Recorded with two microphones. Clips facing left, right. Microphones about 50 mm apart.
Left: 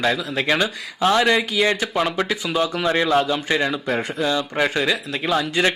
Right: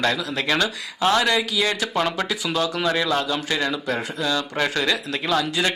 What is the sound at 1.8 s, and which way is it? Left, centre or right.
Speech, centre.